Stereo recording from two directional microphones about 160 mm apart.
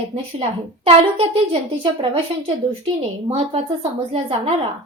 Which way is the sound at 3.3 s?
35° right (ahead or behind).